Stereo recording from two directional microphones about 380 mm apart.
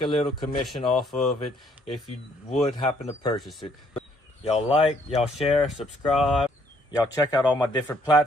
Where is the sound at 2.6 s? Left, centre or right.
Centre.